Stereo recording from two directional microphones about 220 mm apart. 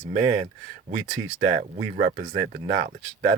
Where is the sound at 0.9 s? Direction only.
30° right (ahead or behind).